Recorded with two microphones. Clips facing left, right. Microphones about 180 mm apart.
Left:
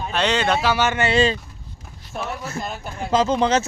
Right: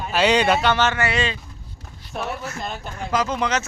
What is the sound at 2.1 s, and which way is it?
Speech, centre (ahead or behind).